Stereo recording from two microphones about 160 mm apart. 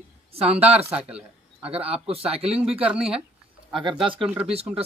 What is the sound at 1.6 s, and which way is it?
Speech, 35° right (ahead or behind).